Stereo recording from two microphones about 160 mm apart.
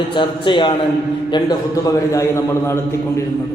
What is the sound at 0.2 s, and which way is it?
Speech, 30° left (ahead or behind).